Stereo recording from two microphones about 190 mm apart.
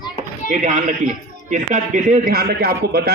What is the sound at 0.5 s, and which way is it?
A man's voice, 40° right (ahead or behind).